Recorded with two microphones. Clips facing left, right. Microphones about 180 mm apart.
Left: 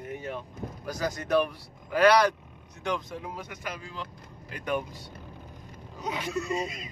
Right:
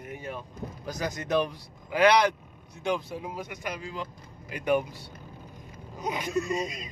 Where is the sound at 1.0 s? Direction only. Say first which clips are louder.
Left 1 dB; 20° right (ahead or behind).